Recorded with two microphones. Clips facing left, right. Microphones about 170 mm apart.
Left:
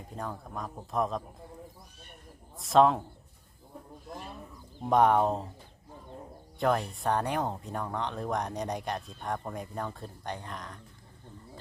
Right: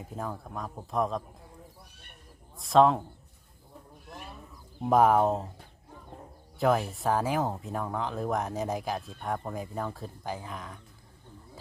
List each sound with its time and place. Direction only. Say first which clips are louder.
0.0 s speech: right 2 dB; 5° right (ahead or behind)
2.6 s speech: right 1 dB; centre (ahead or behind)
4.8 s speech: right 1 dB; 5° right (ahead or behind)
6.6 s speech: right 2 dB; 5° right (ahead or behind)